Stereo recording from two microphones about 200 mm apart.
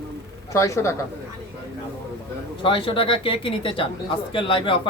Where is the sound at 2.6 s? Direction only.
25° left (ahead or behind).